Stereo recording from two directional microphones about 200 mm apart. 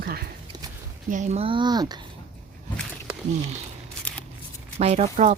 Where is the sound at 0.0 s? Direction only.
50° right (ahead or behind).